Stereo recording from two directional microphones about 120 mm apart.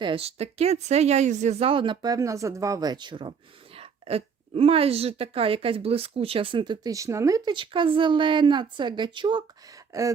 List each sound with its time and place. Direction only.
0.0 s speech: 50° right (ahead or behind); by 1.7 s 65° right (ahead or behind)
1.7 s speech: 45° right (ahead or behind)
3.8 s speech: 55° right (ahead or behind)
6.9 s speech: 25° right (ahead or behind)
7.5 s speech: 45° right (ahead or behind)
9.9 s speech: 25° right (ahead or behind)